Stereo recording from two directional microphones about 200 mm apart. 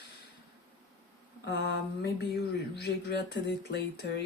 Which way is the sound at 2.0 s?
55° left (ahead or behind).